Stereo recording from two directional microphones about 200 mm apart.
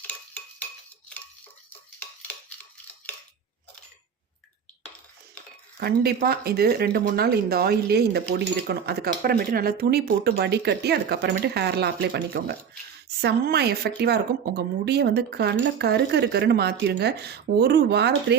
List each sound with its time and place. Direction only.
5.8 s speech: 50° right (ahead or behind)